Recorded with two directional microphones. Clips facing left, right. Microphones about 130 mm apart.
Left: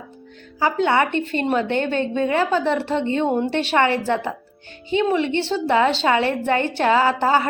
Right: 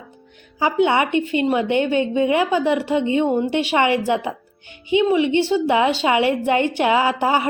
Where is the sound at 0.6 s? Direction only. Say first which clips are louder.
Right 1 dB; 15° right (ahead or behind).